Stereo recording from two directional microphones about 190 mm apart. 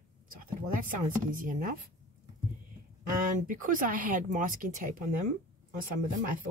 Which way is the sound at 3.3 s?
45° right (ahead or behind).